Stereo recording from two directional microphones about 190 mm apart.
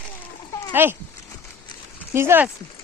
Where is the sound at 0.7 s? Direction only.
10° right (ahead or behind).